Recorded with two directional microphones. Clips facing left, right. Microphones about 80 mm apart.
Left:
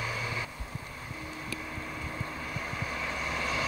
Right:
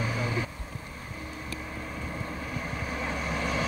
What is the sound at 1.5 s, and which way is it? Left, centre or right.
Vehicle, centre.